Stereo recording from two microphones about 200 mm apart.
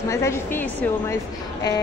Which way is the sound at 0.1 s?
15° left (ahead or behind).